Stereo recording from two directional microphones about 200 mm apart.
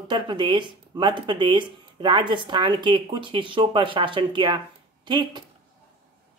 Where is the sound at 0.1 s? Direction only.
25° right (ahead or behind).